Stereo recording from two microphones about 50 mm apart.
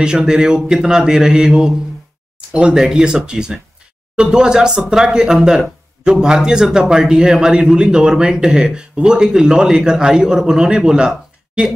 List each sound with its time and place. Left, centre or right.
0.0 s a man's voice: centre